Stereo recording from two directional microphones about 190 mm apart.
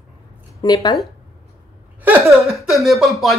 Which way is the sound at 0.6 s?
20° left (ahead or behind).